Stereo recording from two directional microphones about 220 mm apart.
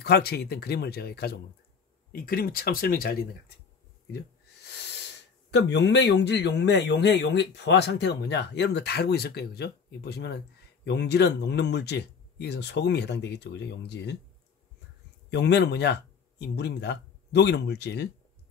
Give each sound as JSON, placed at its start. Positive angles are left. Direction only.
{"t": 0.0, "sound": "speech", "side_deg": 45}
{"t": 4.9, "sound": "speech", "side_deg": 50}
{"t": 15.2, "sound": "speech", "side_deg": 50}